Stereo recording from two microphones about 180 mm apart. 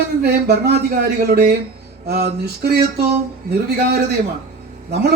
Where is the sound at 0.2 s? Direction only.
65° right (ahead or behind).